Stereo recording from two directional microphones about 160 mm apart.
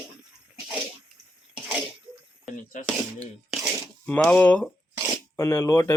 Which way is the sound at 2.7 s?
55° left (ahead or behind).